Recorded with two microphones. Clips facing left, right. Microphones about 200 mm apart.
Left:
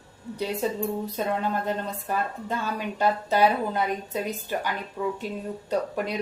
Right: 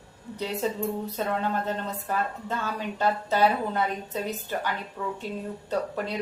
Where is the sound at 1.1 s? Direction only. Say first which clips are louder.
Left 1 dB; 10° left (ahead or behind).